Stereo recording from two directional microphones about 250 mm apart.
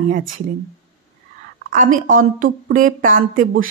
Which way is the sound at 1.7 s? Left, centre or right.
Right.